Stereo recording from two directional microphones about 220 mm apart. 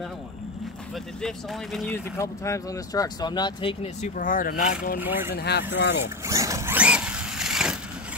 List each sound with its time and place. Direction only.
1.2 s speech: centre (ahead or behind)
2.1 s speech: 15° left (ahead or behind); by 4.7 s 40° left (ahead or behind)
5.0 s speech: 10° right (ahead or behind)
5.3 s speech: 50° left (ahead or behind)
6.2 s zipper: 15° right (ahead or behind)